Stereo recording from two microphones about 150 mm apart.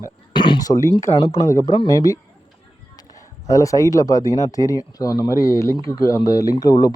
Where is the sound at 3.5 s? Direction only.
20° left (ahead or behind).